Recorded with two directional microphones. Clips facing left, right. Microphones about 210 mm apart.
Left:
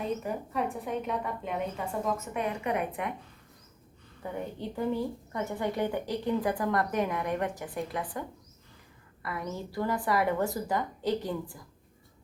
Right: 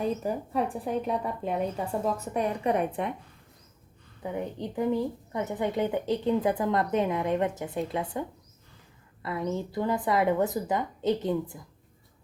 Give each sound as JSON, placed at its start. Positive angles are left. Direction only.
{"t": 0.2, "sound": "speech", "side_deg": -35}
{"t": 4.2, "sound": "a woman's voice", "side_deg": -15}
{"t": 9.2, "sound": "a woman's voice", "side_deg": -25}